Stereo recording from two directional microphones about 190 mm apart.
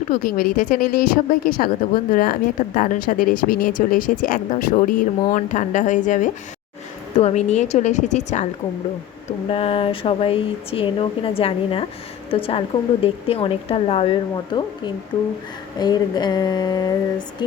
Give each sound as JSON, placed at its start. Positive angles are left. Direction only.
{"t": 0.1, "sound": "a woman's voice", "side_deg": 50}
{"t": 9.5, "sound": "a woman's voice", "side_deg": 30}